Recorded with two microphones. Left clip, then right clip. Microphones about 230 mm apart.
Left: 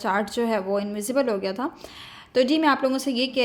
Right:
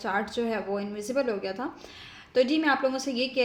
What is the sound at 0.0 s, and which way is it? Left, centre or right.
A woman's voice, left.